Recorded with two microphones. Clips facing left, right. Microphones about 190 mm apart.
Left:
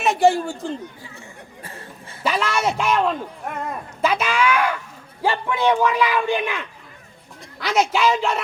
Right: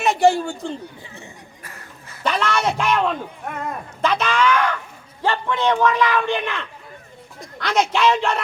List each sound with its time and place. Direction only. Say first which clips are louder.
0.0 s a man's voice: right 1 dB; centre (ahead or behind)
1.6 s a sound: left 5 dB; 30° left (ahead or behind)
2.2 s a man's voice: right 1 dB; 5° left (ahead or behind)